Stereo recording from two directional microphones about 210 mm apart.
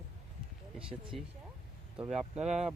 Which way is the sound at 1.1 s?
Centre (ahead or behind).